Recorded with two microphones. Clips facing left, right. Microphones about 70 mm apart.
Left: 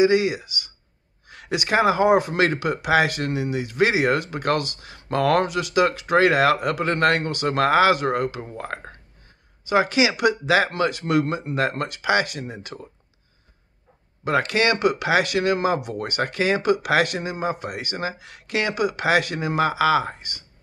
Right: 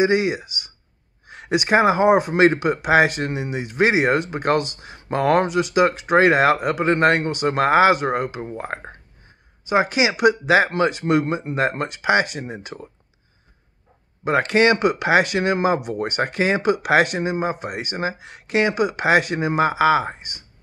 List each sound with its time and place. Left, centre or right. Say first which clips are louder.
0.0 s speech: even; right
14.2 s speech: right 4 dB; right